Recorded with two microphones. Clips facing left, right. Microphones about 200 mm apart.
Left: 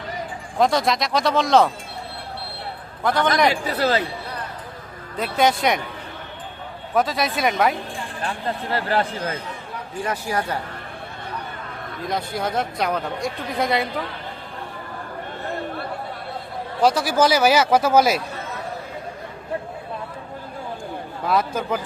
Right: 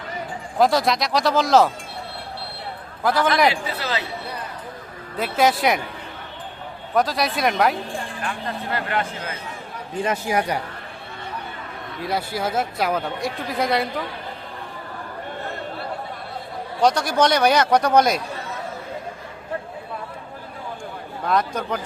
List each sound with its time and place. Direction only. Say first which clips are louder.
0.6 s speech: right 1 dB; centre (ahead or behind)
3.0 s a man's voice: right 1 dB; centre (ahead or behind)
3.5 s speech: left 6 dB; 45° left (ahead or behind)
5.1 s speech: even; centre (ahead or behind)
6.9 s speech: even; centre (ahead or behind)
8.2 s speech: left 6 dB; 30° left (ahead or behind)
10.0 s speech: right 3 dB; 20° right (ahead or behind)
12.0 s speech: right 1 dB; 5° right (ahead or behind)
16.8 s speech: even; 5° left (ahead or behind)
21.2 s speech: left 1 dB; 5° left (ahead or behind)